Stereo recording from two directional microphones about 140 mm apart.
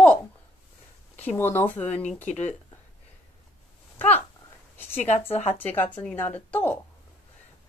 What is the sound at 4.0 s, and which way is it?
Speech, 10° left (ahead or behind).